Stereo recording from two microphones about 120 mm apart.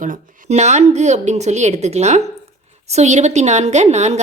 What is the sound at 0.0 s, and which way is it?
A woman's voice, 80° right.